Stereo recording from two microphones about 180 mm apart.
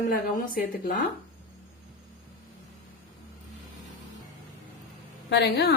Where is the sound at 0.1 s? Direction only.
55° left (ahead or behind).